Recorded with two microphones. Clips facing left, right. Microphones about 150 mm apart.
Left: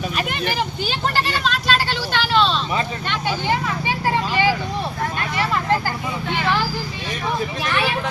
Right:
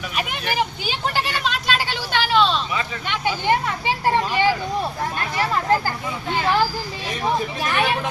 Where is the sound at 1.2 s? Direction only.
15° right (ahead or behind).